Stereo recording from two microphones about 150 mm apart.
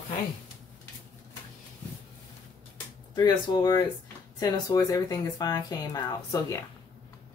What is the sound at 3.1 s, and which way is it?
Speech, 30° left (ahead or behind).